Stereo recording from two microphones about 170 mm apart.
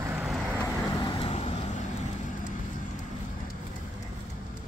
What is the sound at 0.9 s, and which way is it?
Vehicle, 25° left (ahead or behind).